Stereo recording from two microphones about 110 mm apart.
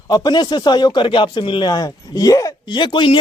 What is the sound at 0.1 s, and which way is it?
Speech, 40° left (ahead or behind).